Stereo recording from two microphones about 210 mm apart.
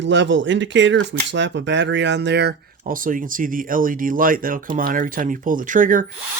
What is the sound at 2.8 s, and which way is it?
Speech, 40° right (ahead or behind).